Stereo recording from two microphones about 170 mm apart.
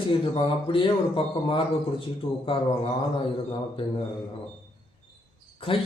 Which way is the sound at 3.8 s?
30° left (ahead or behind).